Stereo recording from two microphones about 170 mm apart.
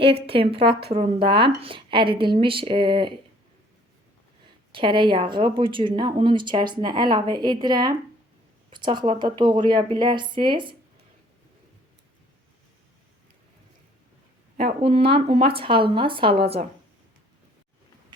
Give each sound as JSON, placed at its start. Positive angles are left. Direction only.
{"t": 0.0, "sound": "a woman's voice", "side_deg": -35}
{"t": 4.7, "sound": "speech", "side_deg": -30}
{"t": 14.8, "sound": "a woman's voice", "side_deg": -35}